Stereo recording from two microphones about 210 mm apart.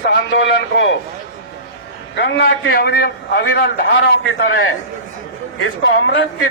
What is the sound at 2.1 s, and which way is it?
Speech, 55° left (ahead or behind).